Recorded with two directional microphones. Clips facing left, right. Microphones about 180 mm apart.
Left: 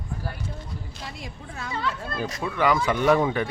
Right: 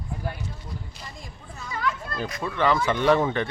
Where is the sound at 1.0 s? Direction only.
90° left.